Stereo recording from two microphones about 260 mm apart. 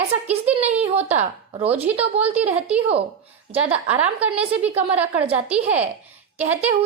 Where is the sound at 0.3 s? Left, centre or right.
Centre.